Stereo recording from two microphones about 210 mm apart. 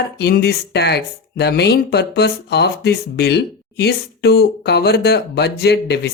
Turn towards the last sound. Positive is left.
turn(degrees=50)  # may be behind; listen again after turning